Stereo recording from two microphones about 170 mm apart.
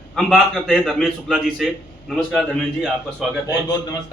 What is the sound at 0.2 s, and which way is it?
A man's voice, centre (ahead or behind).